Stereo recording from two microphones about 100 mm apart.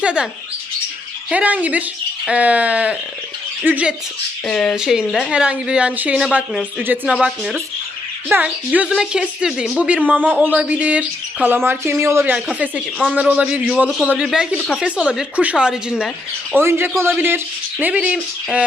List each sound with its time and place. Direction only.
0.0 s speech: 10° right (ahead or behind)
1.3 s speech: 15° right (ahead or behind)
4.5 s speech: centre (ahead or behind); by 12.3 s 25° right (ahead or behind)
12.5 s speech: 15° right (ahead or behind)
16.5 s speech: 25° right (ahead or behind)